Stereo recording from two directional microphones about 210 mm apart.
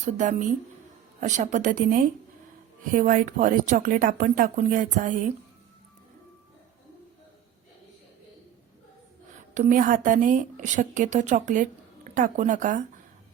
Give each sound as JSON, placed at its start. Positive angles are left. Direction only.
{"t": 0.0, "sound": "speech", "side_deg": -35}
{"t": 9.6, "sound": "speech", "side_deg": -40}